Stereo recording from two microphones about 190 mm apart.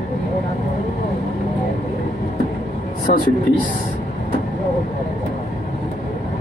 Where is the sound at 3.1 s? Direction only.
35° left (ahead or behind).